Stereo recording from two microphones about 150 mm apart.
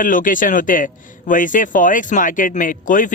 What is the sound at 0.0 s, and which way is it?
Speech, 65° left (ahead or behind).